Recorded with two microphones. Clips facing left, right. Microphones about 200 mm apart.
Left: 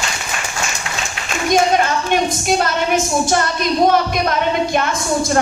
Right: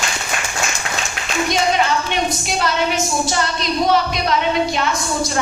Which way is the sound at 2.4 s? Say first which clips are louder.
Left 3 dB; 50° left (ahead or behind).